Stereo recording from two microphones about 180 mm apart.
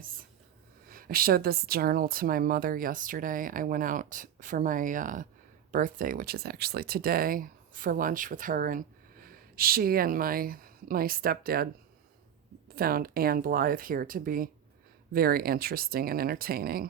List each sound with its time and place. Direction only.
0.9 s a woman's voice: 55° right (ahead or behind)